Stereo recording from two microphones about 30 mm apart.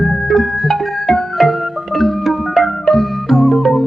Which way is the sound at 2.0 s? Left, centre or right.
Centre.